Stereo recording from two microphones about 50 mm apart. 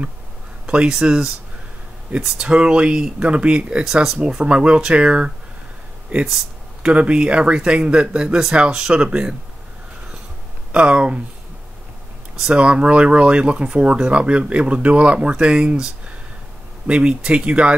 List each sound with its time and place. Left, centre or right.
1.0 s speech: centre
3.8 s speech: centre
4.3 s speech: centre
6.2 s a sound: centre
6.9 s speech: right
10.7 s speech: right
12.5 s speech: centre